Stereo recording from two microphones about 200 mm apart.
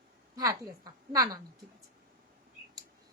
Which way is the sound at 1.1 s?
20° right (ahead or behind).